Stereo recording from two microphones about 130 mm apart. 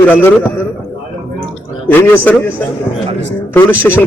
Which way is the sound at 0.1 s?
15° left (ahead or behind).